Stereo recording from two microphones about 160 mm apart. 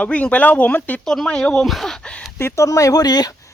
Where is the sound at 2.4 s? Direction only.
20° left (ahead or behind).